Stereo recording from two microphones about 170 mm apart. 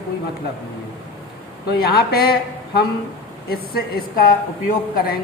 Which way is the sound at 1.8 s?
65° left (ahead or behind).